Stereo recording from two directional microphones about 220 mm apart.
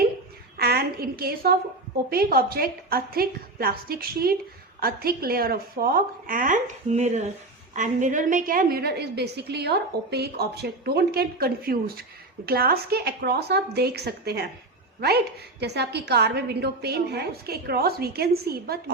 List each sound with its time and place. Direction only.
0.6 s a woman's voice: 45° right (ahead or behind)
15.6 s a woman's voice: 50° right (ahead or behind)